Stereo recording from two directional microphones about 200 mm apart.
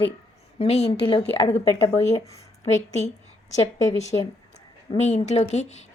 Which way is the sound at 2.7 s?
35° left (ahead or behind).